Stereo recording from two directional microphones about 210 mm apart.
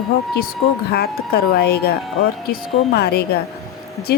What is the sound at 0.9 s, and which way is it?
Speech, 50° left (ahead or behind).